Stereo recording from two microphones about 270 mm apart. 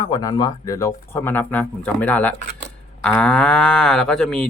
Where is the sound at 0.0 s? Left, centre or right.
Centre.